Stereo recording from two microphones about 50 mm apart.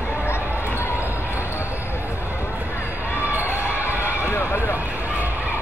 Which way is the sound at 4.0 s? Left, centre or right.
Left.